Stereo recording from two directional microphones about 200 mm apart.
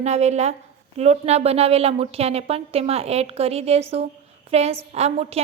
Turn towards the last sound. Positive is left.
turn(degrees=-30)  # may be behind; listen again after turning